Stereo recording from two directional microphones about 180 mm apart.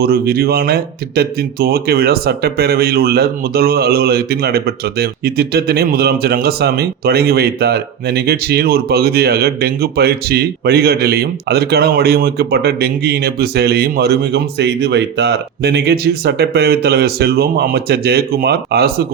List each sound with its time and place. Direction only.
0.0 s speech: 60° right (ahead or behind)